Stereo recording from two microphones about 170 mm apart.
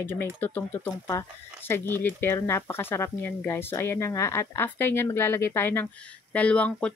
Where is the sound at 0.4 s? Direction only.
10° left (ahead or behind).